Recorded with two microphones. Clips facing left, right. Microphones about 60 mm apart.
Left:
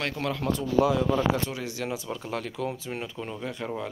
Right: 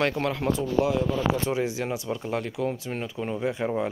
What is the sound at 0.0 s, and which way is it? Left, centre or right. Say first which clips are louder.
Speech: right 4 dB; centre.